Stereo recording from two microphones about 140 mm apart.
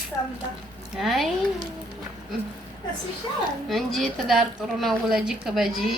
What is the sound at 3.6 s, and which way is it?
A woman's voice, centre (ahead or behind).